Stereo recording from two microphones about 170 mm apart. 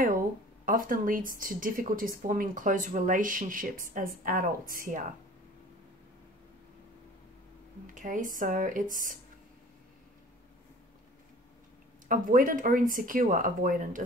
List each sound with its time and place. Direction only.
0.7 s speech: 55° right (ahead or behind)
7.8 s speech: 50° right (ahead or behind)
12.1 s speech: 55° right (ahead or behind)